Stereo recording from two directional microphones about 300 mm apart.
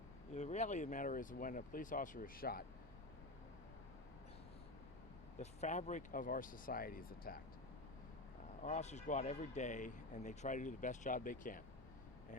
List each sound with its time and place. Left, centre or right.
0.3 s speech: left
5.4 s speech: left
8.6 s speech: left